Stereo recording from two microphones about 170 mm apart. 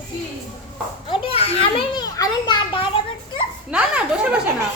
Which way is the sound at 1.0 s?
35° left (ahead or behind).